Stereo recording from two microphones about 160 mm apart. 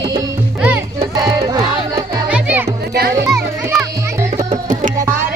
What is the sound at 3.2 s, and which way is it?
Children playing, 20° right (ahead or behind).